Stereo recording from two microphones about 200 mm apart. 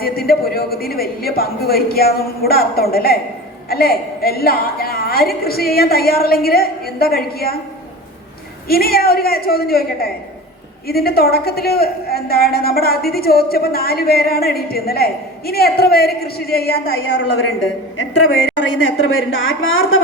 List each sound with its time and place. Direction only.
0.0 s a woman's voice: 50° left (ahead or behind)
8.6 s a woman's voice: 50° left (ahead or behind)
18.8 s a woman's voice: 85° left